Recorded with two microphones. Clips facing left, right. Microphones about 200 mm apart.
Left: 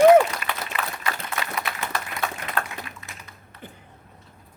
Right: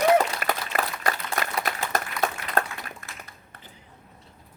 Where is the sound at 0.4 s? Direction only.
40° right (ahead or behind).